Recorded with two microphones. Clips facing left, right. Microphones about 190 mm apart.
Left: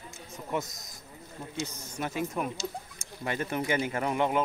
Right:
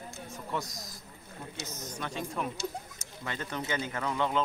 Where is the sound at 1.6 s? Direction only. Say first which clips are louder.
Even; 10° left (ahead or behind).